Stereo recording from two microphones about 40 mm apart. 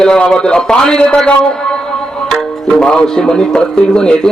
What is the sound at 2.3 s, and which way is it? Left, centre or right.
A man's voice, centre.